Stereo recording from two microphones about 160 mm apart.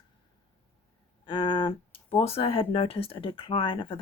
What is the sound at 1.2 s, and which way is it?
Speech, 30° left (ahead or behind).